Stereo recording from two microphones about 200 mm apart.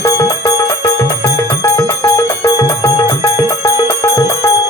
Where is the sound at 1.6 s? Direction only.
15° left (ahead or behind).